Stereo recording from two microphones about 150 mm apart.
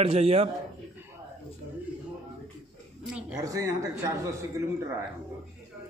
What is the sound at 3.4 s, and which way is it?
Speech, 20° right (ahead or behind).